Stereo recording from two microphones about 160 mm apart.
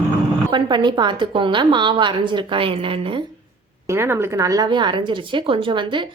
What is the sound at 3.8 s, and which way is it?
Speech, 15° right (ahead or behind).